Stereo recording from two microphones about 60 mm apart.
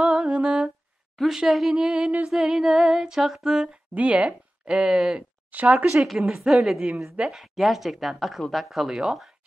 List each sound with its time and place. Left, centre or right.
0.0 s humming: centre
1.1 s a sound: centre
3.9 s speech: right
5.5 s speech: right
5.9 s speech: centre